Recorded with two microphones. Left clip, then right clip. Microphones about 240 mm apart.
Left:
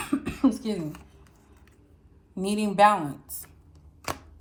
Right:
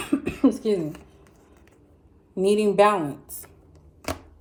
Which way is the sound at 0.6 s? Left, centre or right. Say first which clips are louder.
Right 8 dB; centre.